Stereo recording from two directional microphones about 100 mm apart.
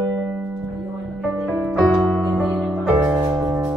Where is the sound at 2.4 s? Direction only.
10° right (ahead or behind).